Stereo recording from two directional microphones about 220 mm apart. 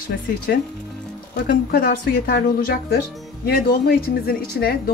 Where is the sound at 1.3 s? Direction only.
40° left (ahead or behind).